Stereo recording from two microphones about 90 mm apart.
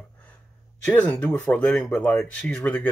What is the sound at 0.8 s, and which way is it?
Speech, 15° left (ahead or behind).